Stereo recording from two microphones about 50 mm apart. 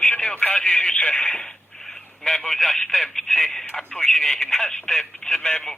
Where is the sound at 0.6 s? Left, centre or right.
Centre.